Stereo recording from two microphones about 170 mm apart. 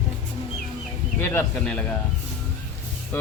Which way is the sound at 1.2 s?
10° left (ahead or behind).